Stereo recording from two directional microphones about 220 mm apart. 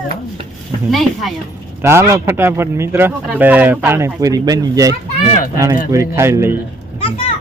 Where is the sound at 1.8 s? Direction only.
10° right (ahead or behind).